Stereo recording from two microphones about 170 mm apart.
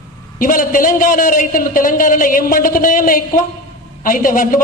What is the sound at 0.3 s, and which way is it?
A man's voice, 55° left (ahead or behind).